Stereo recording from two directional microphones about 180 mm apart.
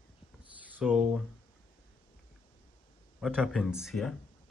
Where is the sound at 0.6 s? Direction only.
5° right (ahead or behind).